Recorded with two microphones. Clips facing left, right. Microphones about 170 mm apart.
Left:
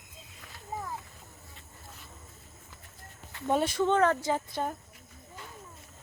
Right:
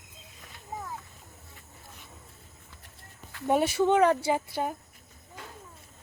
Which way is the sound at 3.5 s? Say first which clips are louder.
Right 3 dB; 5° right (ahead or behind).